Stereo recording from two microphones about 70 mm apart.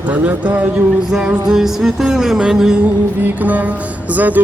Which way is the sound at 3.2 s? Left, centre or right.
Right.